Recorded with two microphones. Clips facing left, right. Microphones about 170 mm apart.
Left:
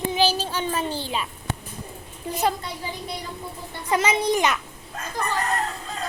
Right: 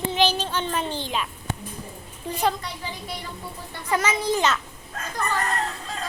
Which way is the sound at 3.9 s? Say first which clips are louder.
Left 2 dB; 20° left (ahead or behind).